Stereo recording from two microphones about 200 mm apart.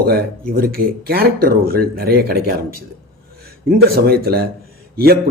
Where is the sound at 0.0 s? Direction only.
50° right (ahead or behind).